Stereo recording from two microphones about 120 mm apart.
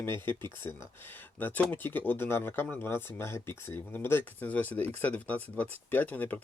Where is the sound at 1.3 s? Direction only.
15° left (ahead or behind).